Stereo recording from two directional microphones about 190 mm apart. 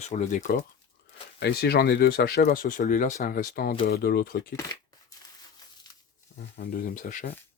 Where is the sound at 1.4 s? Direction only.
55° left (ahead or behind).